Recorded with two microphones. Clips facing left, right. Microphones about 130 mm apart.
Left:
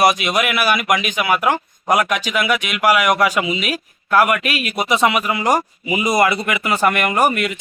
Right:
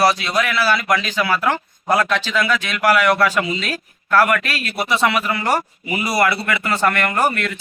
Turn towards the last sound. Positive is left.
turn(degrees=15)  # may be behind; listen again after turning